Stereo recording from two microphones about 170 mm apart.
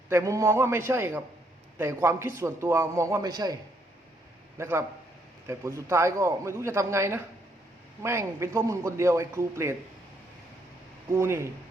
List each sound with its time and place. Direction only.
0.1 s a man's voice: 20° right (ahead or behind)
11.1 s a man's voice: 15° right (ahead or behind)